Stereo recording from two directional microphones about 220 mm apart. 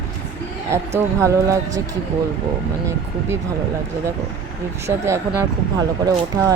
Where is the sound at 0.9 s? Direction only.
15° right (ahead or behind).